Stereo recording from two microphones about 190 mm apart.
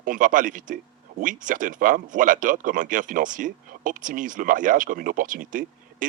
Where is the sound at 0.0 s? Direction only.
45° right (ahead or behind).